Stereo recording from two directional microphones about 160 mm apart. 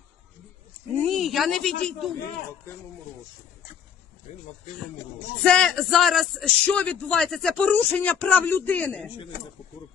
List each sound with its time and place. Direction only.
1.0 s speech: centre (ahead or behind)
5.4 s speech: 5° left (ahead or behind)